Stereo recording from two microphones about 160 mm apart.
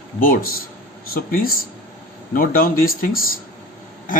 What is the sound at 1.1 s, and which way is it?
A man's voice, 65° left (ahead or behind).